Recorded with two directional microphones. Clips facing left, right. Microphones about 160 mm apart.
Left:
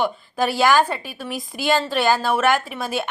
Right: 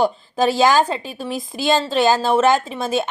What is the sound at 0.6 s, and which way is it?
Speech, 20° right (ahead or behind).